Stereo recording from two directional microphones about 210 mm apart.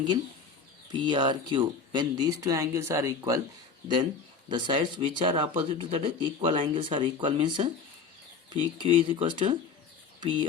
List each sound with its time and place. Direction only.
0.9 s speech: 20° right (ahead or behind)
4.4 s speech: 20° right (ahead or behind)